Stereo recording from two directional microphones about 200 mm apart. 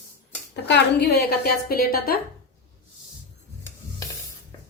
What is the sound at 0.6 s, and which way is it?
A woman's voice, 60° left (ahead or behind).